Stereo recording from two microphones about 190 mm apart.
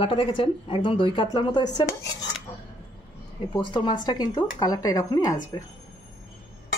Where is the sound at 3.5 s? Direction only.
25° left (ahead or behind).